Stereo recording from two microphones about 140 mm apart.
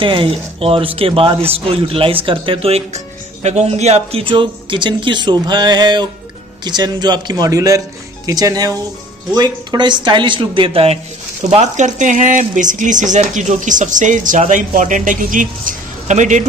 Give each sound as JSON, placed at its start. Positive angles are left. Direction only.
{"t": 0.0, "sound": "a man's voice", "side_deg": -40}
{"t": 11.7, "sound": "speech", "side_deg": -60}